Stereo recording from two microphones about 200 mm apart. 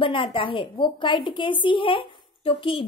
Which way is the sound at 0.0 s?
25° left (ahead or behind).